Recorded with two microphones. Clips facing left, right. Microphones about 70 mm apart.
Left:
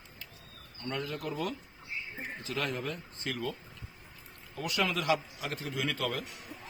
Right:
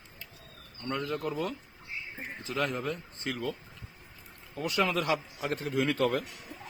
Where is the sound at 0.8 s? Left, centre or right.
Right.